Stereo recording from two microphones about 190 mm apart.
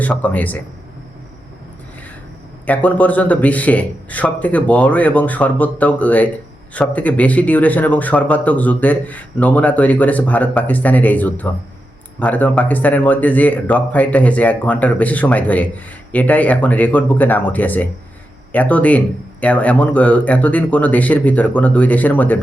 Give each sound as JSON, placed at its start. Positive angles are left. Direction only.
{"t": 0.0, "sound": "speech", "side_deg": 10}
{"t": 2.6, "sound": "speech", "side_deg": 10}